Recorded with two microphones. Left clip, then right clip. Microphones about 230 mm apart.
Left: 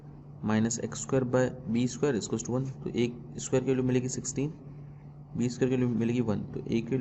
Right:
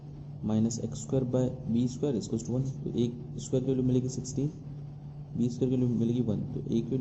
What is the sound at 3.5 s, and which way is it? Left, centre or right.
Speech, left.